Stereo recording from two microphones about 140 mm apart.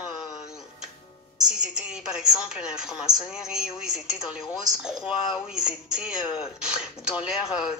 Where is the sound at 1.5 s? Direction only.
5° right (ahead or behind).